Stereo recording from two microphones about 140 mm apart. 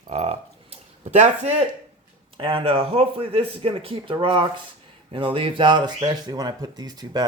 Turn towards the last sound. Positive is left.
turn(degrees=-30)  # may be behind; listen again after turning